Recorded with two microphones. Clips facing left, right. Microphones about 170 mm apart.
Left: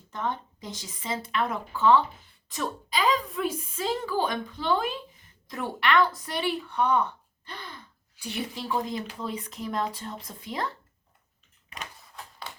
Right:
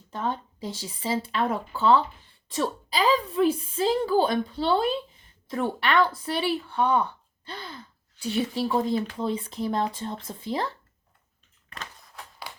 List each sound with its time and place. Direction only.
0.1 s a woman's voice: 30° right (ahead or behind)
6.3 s speech: 5° right (ahead or behind)
6.7 s speech: 30° right (ahead or behind)
7.4 s gasp: 30° right (ahead or behind)
8.2 s speech: 30° right (ahead or behind)